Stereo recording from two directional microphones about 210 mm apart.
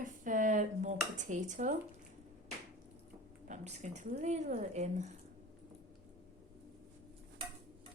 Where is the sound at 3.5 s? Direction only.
35° right (ahead or behind).